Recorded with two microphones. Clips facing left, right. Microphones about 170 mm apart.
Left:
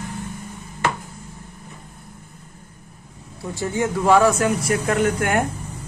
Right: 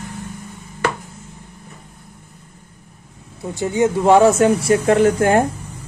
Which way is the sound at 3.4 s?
20° right (ahead or behind).